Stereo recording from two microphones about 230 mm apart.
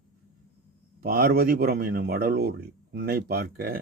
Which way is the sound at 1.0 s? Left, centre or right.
Right.